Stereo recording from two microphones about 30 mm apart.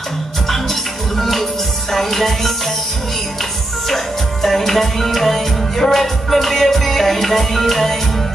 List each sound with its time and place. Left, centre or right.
0.5 s music: centre
3.9 s music: centre